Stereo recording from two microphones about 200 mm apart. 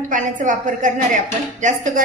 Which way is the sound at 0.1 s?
40° right (ahead or behind).